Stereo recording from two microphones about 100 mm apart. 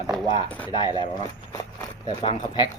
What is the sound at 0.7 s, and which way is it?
Speech, 45° left (ahead or behind).